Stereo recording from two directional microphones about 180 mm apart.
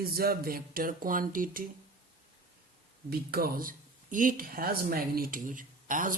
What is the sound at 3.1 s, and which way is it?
Speech, 55° right (ahead or behind).